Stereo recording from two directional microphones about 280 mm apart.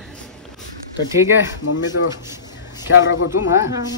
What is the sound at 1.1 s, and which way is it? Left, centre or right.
Speech, centre.